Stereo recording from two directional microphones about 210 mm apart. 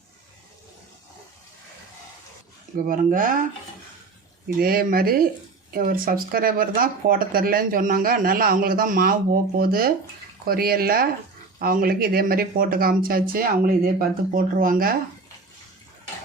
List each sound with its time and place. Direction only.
2.8 s speech: 40° right (ahead or behind)
4.4 s speech: 45° right (ahead or behind)